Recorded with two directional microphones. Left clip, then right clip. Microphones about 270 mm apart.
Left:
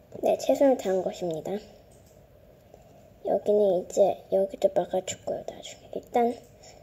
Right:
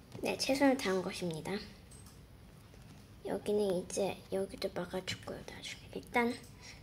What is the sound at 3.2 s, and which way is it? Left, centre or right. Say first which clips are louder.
A child's voice: left 11 dB; centre.